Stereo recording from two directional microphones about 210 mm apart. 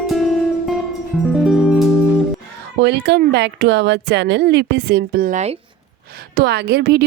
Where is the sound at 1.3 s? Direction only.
Centre (ahead or behind).